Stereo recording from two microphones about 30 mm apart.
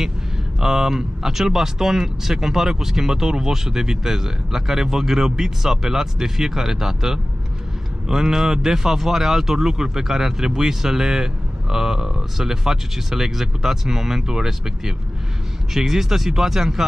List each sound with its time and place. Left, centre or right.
0.6 s speech: centre